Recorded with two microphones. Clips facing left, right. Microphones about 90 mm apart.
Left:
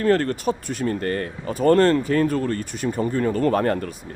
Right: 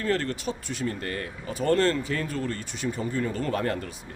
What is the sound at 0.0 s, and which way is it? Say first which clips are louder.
Speech: left 8 dB; 50° left (ahead or behind).